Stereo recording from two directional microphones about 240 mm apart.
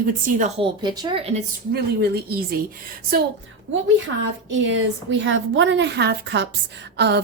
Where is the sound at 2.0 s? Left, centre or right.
Right.